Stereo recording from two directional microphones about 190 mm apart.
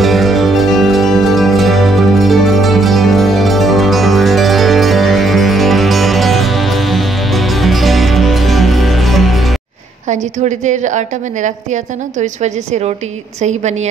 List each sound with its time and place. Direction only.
0.0 s music: centre (ahead or behind)
10.0 s a woman's voice: 40° right (ahead or behind)
13.4 s a woman's voice: 35° right (ahead or behind)